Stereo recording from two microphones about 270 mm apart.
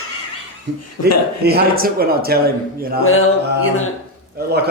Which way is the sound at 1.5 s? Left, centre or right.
Right.